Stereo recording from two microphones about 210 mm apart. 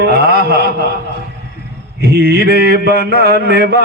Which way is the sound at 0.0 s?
50° right (ahead or behind).